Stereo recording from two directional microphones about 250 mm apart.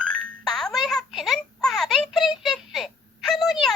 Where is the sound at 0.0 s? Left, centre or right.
Centre.